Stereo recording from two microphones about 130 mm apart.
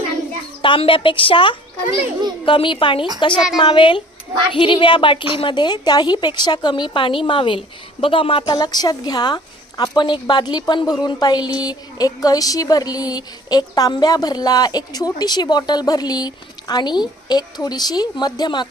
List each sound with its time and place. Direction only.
0.6 s a woman's voice: 40° left (ahead or behind)